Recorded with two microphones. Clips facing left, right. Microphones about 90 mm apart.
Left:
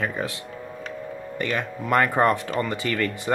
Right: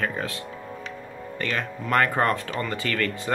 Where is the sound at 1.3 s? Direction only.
15° left (ahead or behind).